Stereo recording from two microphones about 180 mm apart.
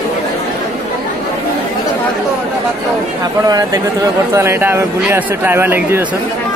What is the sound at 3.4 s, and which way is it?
A man's voice, 20° right (ahead or behind).